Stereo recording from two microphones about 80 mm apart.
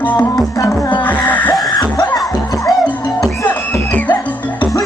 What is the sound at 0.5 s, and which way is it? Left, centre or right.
Music, left.